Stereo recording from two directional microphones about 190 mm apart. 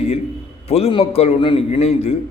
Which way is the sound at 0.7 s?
30° left (ahead or behind).